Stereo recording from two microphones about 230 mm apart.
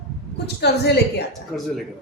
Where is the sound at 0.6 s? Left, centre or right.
Left.